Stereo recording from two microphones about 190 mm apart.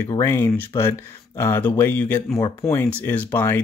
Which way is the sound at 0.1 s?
15° left (ahead or behind).